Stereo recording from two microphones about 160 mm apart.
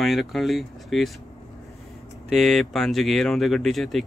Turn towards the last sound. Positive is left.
turn(degrees=0)  # may be behind; listen again after turning